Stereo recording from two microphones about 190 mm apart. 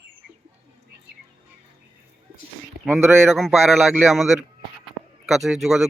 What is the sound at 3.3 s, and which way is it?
Speech, centre (ahead or behind).